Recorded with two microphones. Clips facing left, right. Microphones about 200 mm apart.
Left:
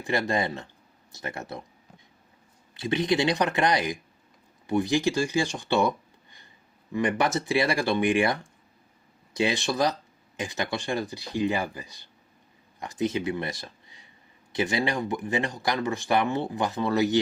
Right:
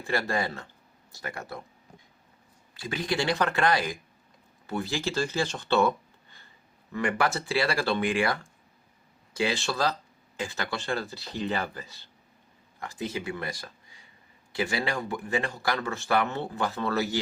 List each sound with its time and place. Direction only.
0.0 s speech: 20° left (ahead or behind)
2.7 s speech: 20° left (ahead or behind)
6.9 s speech: 20° left (ahead or behind)